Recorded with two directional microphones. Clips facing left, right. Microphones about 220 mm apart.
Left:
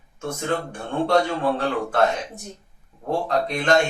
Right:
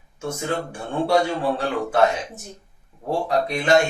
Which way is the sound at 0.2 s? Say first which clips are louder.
Even; 10° right (ahead or behind).